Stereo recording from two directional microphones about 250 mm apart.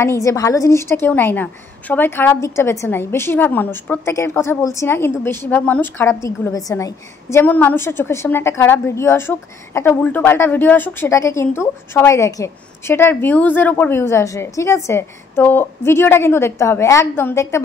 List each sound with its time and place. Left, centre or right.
0.0 s a woman's voice: centre